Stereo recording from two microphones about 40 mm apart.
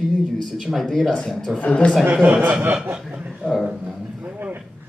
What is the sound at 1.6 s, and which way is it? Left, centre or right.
Speech, left.